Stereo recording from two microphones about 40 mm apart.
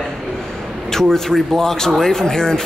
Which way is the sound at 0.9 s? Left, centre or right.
Centre.